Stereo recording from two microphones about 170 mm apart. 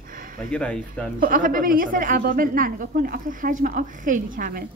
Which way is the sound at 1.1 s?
55° right (ahead or behind).